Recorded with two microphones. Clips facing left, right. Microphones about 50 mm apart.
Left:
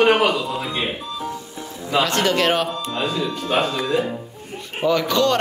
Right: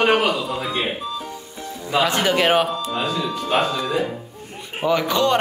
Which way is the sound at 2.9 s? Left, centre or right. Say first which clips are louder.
Left 2 dB; centre.